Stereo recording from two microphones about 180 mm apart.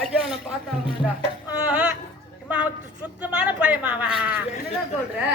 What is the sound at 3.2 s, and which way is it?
Speech, 5° right (ahead or behind).